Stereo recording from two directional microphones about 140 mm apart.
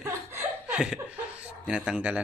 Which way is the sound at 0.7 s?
5° right (ahead or behind).